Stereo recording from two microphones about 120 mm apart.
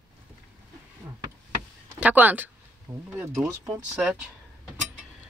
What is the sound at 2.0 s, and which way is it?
Speech, 15° right (ahead or behind).